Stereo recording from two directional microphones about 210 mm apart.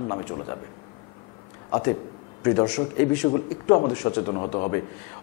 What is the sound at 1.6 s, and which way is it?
A man's voice, 20° left (ahead or behind).